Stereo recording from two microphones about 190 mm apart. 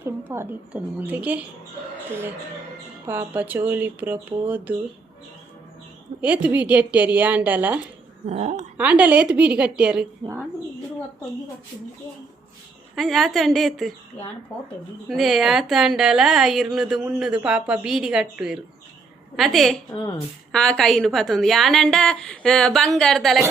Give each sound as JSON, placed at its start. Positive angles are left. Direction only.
{"t": 0.0, "sound": "speech", "side_deg": -10}
{"t": 3.1, "sound": "speech", "side_deg": -10}
{"t": 6.2, "sound": "speech", "side_deg": -5}
{"t": 8.3, "sound": "speech", "side_deg": -40}
{"t": 8.8, "sound": "a woman's voice", "side_deg": -5}
{"t": 13.0, "sound": "a woman's voice", "side_deg": 0}
{"t": 15.0, "sound": "a woman's voice", "side_deg": 0}
{"t": 19.9, "sound": "a woman's voice", "side_deg": 25}
{"t": 20.5, "sound": "a woman's voice", "side_deg": 5}